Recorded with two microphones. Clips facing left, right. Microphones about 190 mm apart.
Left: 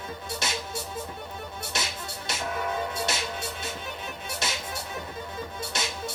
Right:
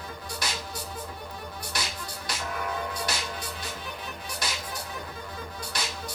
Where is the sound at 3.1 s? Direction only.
25° left (ahead or behind).